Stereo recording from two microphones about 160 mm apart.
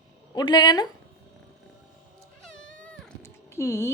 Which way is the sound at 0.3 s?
25° left (ahead or behind).